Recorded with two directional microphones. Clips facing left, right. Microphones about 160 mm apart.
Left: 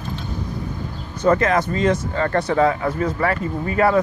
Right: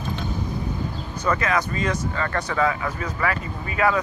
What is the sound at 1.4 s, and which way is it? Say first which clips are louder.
Speech: left 5 dB; 25° left (ahead or behind).